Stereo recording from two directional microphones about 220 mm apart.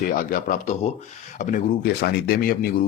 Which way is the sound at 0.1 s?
40° left (ahead or behind).